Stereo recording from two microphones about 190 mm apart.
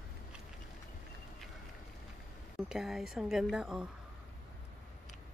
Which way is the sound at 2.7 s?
Centre (ahead or behind).